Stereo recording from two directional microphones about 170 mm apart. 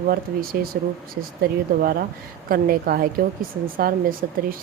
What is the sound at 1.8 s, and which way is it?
Speech, 60° right (ahead or behind).